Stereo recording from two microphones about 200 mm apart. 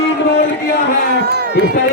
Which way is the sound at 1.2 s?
55° right (ahead or behind).